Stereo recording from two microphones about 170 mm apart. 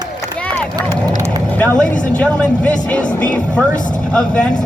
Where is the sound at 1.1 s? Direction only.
20° right (ahead or behind).